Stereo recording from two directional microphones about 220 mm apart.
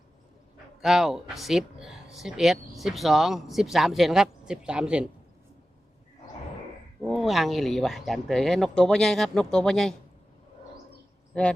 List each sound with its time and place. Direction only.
0.8 s speech: centre (ahead or behind)
7.0 s speech: centre (ahead or behind)
11.3 s speech: 5° left (ahead or behind)